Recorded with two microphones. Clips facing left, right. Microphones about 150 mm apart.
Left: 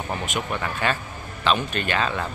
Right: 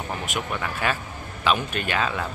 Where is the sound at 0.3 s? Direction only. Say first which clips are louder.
Left 1 dB; centre (ahead or behind).